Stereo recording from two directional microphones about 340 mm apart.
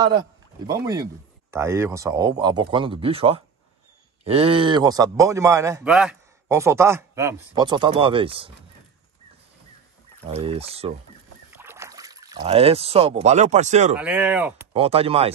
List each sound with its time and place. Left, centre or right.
0.0 s a man's voice: centre
10.2 s a man's voice: centre
13.9 s speech: centre
14.7 s a man's voice: centre